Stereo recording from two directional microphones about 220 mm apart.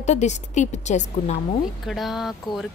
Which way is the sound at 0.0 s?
30° left (ahead or behind).